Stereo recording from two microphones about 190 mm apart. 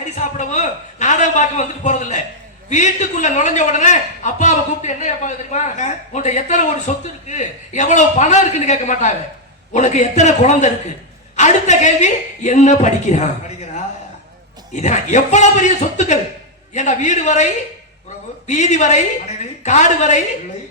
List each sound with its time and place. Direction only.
0.2 s a man's voice: 40° left (ahead or behind)
14.7 s a man's voice: 40° left (ahead or behind)